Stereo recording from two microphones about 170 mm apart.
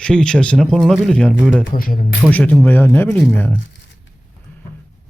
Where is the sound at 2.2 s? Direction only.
10° left (ahead or behind).